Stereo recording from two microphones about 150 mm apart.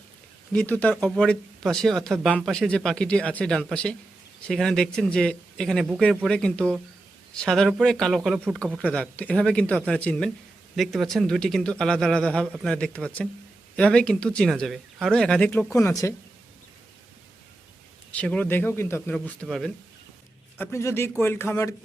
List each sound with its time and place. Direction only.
0.5 s speech: 10° left (ahead or behind)
8.6 s speech: 10° right (ahead or behind)
8.9 s speech: 10° left (ahead or behind)
18.1 s speech: 10° left (ahead or behind)
19.1 s speech: 5° left (ahead or behind)
20.6 s speech: 15° left (ahead or behind)